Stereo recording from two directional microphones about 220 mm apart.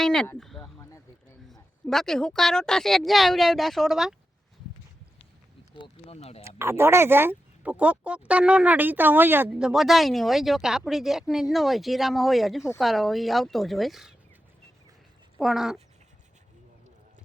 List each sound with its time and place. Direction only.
0.0 s speech: 5° left (ahead or behind)
0.8 s a sound: 15° left (ahead or behind)
1.9 s speech: centre (ahead or behind)
5.7 s speech: 25° left (ahead or behind)
6.6 s speech: 10° right (ahead or behind)
15.4 s speech: centre (ahead or behind)